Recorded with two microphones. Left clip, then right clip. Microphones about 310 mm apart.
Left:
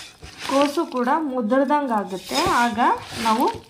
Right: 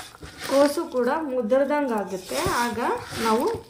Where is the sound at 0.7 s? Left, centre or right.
Left.